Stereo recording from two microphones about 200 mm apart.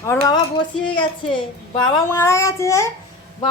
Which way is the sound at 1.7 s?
10° left (ahead or behind).